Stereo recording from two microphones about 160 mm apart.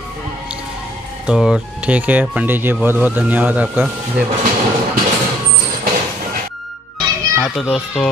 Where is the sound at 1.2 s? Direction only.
5° right (ahead or behind).